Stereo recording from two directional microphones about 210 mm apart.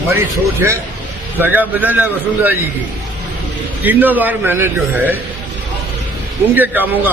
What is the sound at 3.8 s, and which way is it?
A man's voice, 10° right (ahead or behind).